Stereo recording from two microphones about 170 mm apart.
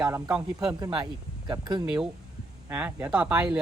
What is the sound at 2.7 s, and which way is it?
Speech, 10° right (ahead or behind).